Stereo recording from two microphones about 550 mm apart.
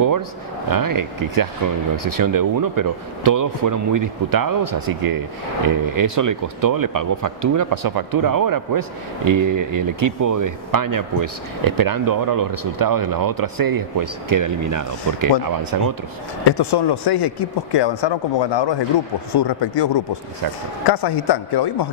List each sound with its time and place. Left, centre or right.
0.7 s speech: right
16.4 s speech: left